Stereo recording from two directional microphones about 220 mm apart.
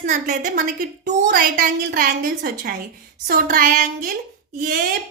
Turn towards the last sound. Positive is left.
turn(degrees=-40)  # may be behind; listen again after turning